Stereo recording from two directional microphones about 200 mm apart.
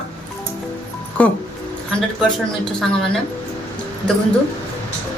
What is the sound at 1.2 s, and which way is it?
Speech, 5° left (ahead or behind).